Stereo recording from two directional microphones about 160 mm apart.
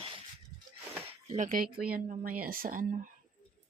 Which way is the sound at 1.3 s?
55° right (ahead or behind).